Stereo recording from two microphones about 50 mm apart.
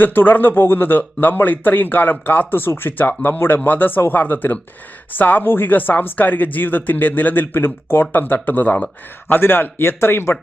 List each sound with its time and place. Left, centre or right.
0.0 s speech: left
8.1 s speech: left